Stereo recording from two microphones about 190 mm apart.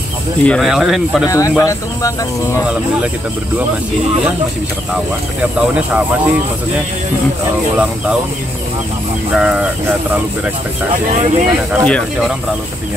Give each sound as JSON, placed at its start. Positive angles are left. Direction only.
{"t": 0.4, "sound": "speech", "side_deg": 5}
{"t": 1.2, "sound": "speech", "side_deg": 15}
{"t": 5.4, "sound": "speech", "side_deg": -5}
{"t": 9.3, "sound": "speech", "side_deg": -5}
{"t": 11.1, "sound": "speech", "side_deg": -35}
{"t": 11.8, "sound": "speech", "side_deg": 0}